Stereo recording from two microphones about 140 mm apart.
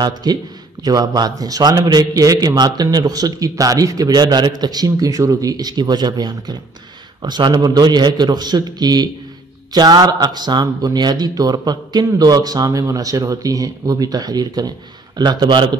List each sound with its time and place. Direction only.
0.0 s a man's voice: 30° right (ahead or behind)